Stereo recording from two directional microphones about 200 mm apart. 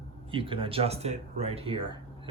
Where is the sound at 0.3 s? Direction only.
25° right (ahead or behind).